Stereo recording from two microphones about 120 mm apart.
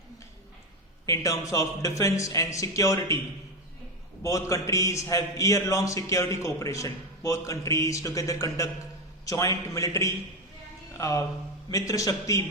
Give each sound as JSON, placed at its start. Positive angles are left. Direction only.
{"t": 1.0, "sound": "a man's voice", "side_deg": 25}
{"t": 4.2, "sound": "a man's voice", "side_deg": 25}